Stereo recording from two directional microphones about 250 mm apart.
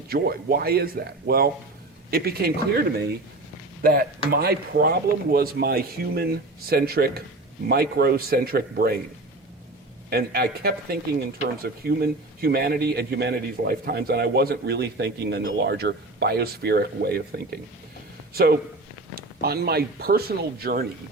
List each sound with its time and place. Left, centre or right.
0.1 s a man's voice: right
3.8 s a man's voice: right
10.1 s a man's voice: right